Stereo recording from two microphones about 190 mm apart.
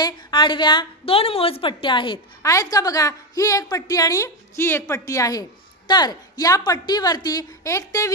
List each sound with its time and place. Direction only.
0.0 s a woman's voice: 25° left (ahead or behind)